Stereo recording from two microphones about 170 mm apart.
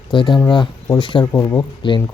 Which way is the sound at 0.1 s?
25° left (ahead or behind).